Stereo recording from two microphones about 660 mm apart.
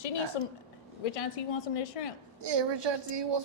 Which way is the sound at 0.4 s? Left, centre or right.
Left.